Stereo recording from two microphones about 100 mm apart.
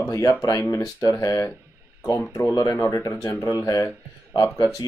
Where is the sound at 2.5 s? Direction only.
35° left (ahead or behind).